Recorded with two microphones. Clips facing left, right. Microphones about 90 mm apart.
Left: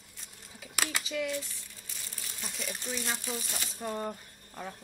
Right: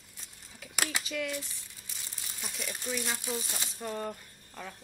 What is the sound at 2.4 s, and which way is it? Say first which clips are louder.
Speech: even; centre (ahead or behind).